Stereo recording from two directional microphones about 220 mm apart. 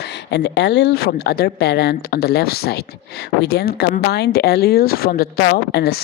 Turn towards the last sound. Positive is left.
turn(degrees=45)  # may be behind; listen again after turning